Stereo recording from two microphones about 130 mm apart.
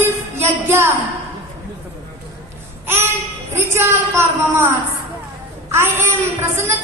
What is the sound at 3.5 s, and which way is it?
A woman's voice, 20° right (ahead or behind).